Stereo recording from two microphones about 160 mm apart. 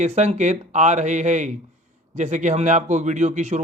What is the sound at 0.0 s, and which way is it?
A man's voice, 45° right (ahead or behind).